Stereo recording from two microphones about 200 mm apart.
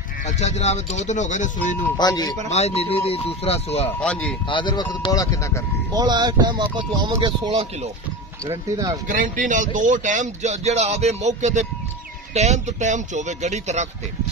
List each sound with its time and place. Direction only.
0.2 s speech: 35° left (ahead or behind)
2.0 s speech: 20° left (ahead or behind)
2.5 s speech: 30° left (ahead or behind)
4.0 s a man's voice: 5° left (ahead or behind)
4.5 s speech: 25° left (ahead or behind)
5.9 s speech: 20° right (ahead or behind)
9.0 s speech: 40° right (ahead or behind)